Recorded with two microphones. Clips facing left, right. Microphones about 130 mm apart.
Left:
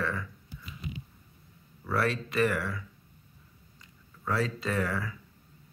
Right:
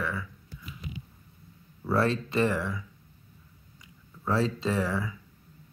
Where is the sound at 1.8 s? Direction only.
25° right (ahead or behind).